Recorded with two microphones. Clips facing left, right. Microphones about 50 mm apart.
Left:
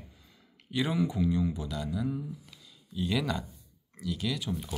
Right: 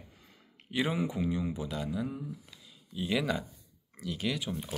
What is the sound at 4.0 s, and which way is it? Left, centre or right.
Speech, right.